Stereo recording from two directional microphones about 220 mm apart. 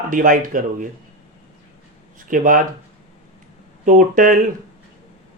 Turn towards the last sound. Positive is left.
turn(degrees=-40)  # may be behind; listen again after turning